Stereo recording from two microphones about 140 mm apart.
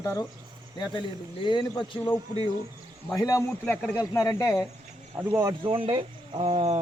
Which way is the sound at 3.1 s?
25° left (ahead or behind).